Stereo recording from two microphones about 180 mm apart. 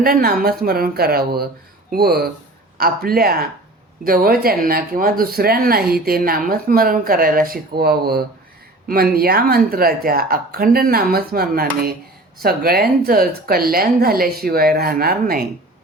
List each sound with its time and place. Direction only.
0.0 s speech: 55° right (ahead or behind)